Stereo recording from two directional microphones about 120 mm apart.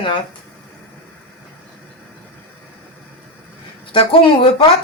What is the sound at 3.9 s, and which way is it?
Speech, 45° left (ahead or behind).